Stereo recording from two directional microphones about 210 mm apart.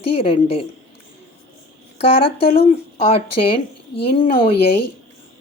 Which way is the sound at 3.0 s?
25° left (ahead or behind).